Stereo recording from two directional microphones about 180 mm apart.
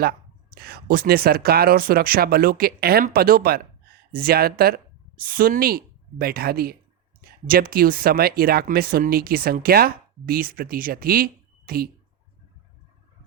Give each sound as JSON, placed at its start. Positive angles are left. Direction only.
{"t": 0.0, "sound": "speech", "side_deg": -55}